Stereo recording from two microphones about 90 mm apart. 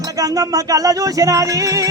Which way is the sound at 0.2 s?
40° right (ahead or behind).